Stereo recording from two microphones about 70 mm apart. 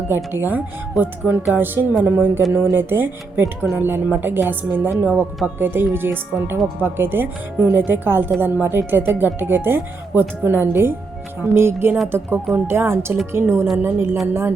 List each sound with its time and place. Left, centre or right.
0.3 s speech: right